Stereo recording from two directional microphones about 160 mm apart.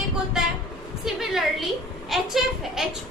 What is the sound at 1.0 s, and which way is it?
A woman's voice, centre (ahead or behind).